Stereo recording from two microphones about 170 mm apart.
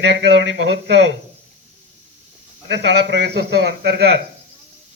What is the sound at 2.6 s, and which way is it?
A man's voice, 90° right.